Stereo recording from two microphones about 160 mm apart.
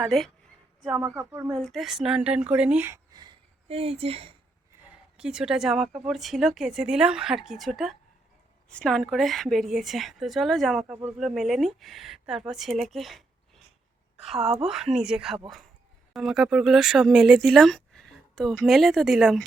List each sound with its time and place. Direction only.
0.0 s speech: centre (ahead or behind)
0.9 s speech: 20° right (ahead or behind)
1.6 s speech: centre (ahead or behind); by 3.3 s 25° right (ahead or behind)
3.7 s speech: 35° right (ahead or behind)
4.7 s speech: 5° right (ahead or behind)
14.3 s speech: centre (ahead or behind)